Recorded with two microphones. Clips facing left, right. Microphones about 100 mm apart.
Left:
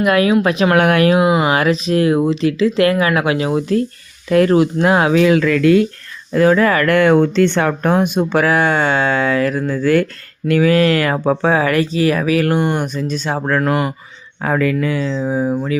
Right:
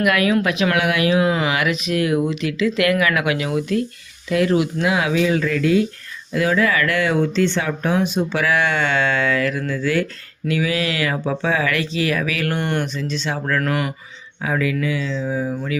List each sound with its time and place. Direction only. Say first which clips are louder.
0.0 s speech: left 4 dB; 30° left (ahead or behind); by 1.2 s 45° left (ahead or behind)
1.2 s speech: left 5 dB; 20° left (ahead or behind)
1.5 s speech: left 6 dB; 35° left (ahead or behind)
4.3 s speech: left 6 dB; 45° left (ahead or behind)
5.2 s speech: left 6 dB; 70° left (ahead or behind)
6.3 s speech: left 6 dB; 40° left (ahead or behind)
12.5 s speech: left 5 dB; 15° left (ahead or behind)
12.9 s speech: left 4 dB; 45° left (ahead or behind)
13.6 s speech: left 6 dB; 30° left (ahead or behind)
14.4 s speech: left 5 dB; 50° left (ahead or behind)